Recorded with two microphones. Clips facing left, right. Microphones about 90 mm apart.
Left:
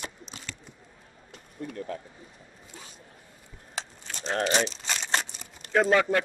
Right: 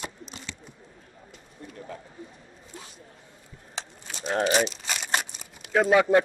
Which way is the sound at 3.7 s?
5° right (ahead or behind).